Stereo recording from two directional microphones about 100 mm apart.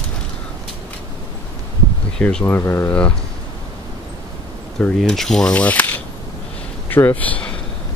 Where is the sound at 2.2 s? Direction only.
10° left (ahead or behind).